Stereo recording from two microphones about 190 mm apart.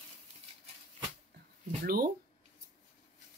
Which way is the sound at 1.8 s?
50° right (ahead or behind).